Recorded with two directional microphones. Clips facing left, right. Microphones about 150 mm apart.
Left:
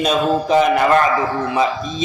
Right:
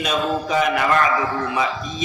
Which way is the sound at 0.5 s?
35° left (ahead or behind).